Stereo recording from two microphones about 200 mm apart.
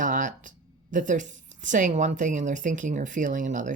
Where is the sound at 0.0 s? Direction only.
40° right (ahead or behind).